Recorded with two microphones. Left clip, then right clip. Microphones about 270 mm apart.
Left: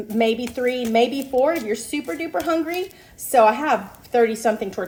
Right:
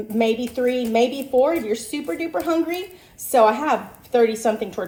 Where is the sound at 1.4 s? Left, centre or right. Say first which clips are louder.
Right 1 dB; left.